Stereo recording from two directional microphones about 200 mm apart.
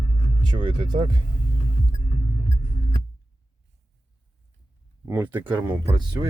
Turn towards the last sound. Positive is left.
turn(degrees=-15)  # may be behind; listen again after turning